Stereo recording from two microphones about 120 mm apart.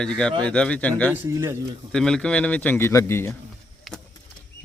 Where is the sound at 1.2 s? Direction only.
20° right (ahead or behind).